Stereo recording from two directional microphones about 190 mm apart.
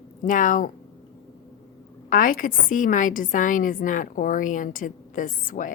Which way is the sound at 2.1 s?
45° left (ahead or behind).